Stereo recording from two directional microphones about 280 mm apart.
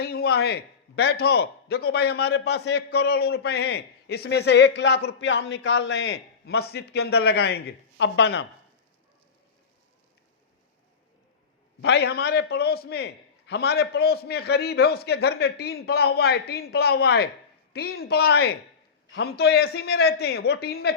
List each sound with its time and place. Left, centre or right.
0.0 s speech: left
11.8 s speech: left